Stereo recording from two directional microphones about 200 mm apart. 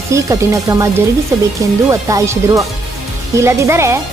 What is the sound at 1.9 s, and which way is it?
Speech, 15° right (ahead or behind).